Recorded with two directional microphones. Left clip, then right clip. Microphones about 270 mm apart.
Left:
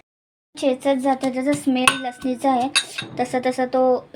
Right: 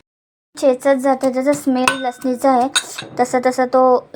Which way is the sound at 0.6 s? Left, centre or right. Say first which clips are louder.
Right 6 dB; centre.